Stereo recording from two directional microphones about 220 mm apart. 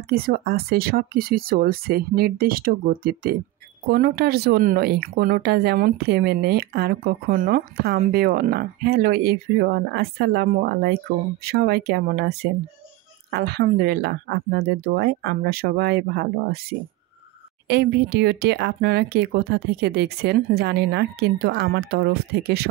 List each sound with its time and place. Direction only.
0.1 s speech: 45° right (ahead or behind)